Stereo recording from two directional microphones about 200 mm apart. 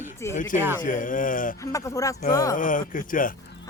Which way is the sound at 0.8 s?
40° left (ahead or behind).